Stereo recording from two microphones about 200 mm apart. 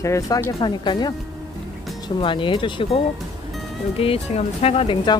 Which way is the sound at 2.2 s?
25° left (ahead or behind).